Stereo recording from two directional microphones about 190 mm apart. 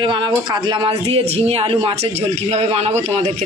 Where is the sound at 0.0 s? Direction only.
25° right (ahead or behind).